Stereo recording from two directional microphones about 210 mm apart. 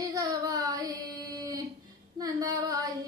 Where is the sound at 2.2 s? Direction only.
15° right (ahead or behind).